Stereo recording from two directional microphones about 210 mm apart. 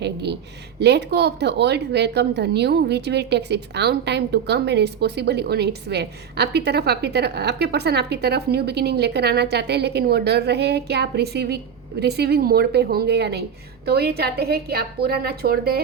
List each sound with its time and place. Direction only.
0.0 s a woman's voice: 55° right (ahead or behind)